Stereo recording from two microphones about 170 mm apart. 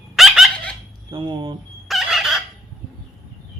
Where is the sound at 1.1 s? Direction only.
30° right (ahead or behind).